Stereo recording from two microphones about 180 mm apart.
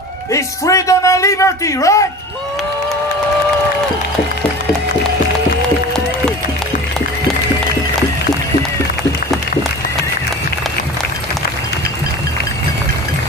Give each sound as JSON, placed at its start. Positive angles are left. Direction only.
{"t": 0.3, "sound": "a man's voice", "side_deg": 20}